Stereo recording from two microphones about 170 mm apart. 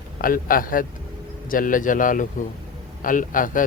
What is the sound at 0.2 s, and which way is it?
A man's voice, 55° left (ahead or behind).